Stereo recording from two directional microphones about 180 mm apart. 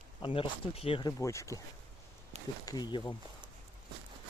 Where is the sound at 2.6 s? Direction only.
20° left (ahead or behind).